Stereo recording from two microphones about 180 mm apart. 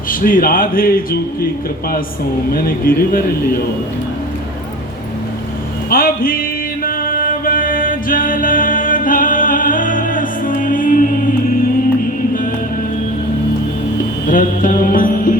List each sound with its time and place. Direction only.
0.1 s a man's voice: 50° left (ahead or behind)
2.5 s a man's voice: 55° left (ahead or behind)
5.9 s a man's voice: 55° left (ahead or behind)
6.8 s music: 50° left (ahead or behind)
14.3 s music: 50° left (ahead or behind)